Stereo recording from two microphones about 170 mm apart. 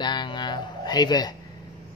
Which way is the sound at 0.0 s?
25° left (ahead or behind).